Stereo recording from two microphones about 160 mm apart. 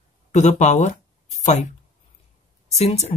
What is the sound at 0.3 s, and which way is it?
Speech, 45° left (ahead or behind).